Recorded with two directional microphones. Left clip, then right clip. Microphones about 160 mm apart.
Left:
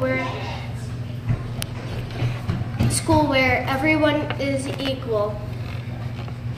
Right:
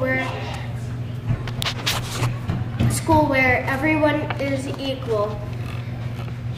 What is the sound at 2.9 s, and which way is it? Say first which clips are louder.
A woman's voice: right 1 dB; 10° left (ahead or behind).